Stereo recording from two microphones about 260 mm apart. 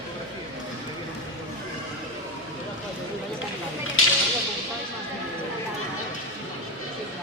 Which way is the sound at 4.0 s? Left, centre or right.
Left.